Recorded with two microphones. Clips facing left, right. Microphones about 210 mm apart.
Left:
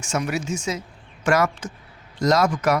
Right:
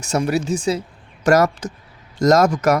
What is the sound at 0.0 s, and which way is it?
A man's voice, 35° right (ahead or behind).